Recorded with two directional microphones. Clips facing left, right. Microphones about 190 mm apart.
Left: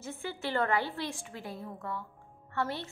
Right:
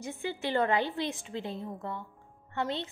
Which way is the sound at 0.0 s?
15° right (ahead or behind).